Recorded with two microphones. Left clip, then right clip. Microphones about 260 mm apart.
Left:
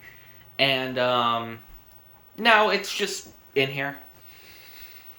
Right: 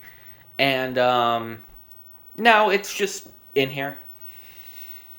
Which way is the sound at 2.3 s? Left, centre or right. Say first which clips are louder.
Right 2 dB; centre.